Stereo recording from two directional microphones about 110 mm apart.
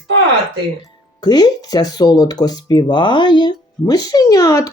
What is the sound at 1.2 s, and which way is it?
Speech, 40° left (ahead or behind).